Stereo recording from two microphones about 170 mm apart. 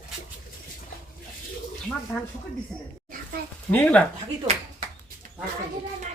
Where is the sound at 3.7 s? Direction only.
10° left (ahead or behind).